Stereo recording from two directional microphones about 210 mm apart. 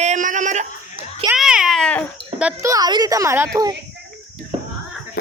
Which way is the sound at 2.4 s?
15° right (ahead or behind).